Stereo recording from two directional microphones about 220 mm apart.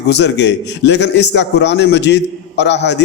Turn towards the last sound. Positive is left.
turn(degrees=50)  # may be behind; listen again after turning